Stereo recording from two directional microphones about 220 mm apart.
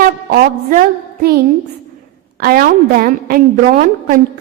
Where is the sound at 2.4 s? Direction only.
40° right (ahead or behind).